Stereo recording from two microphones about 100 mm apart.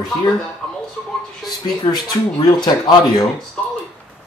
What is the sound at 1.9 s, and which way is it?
Speech, 45° left (ahead or behind).